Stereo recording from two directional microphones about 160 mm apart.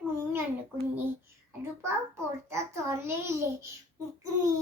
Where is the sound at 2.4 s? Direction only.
15° right (ahead or behind).